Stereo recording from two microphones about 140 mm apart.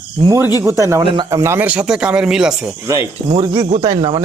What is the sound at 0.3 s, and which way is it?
Speech, 20° right (ahead or behind).